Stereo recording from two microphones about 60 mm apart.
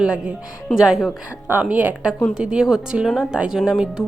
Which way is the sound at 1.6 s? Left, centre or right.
Right.